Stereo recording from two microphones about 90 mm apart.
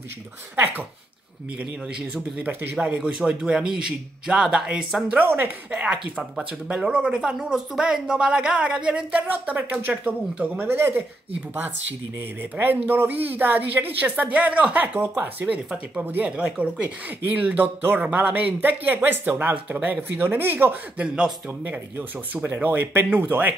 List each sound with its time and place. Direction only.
2.3 s speech: 20° right (ahead or behind)
2.8 s speech: 10° right (ahead or behind)
5.1 s speech: 20° right (ahead or behind)
5.8 s speech: 10° right (ahead or behind)
12.2 s speech: 25° right (ahead or behind)
15.4 s speech: 10° right (ahead or behind)
21.1 s speech: 10° right (ahead or behind)
21.9 s speech: 25° right (ahead or behind)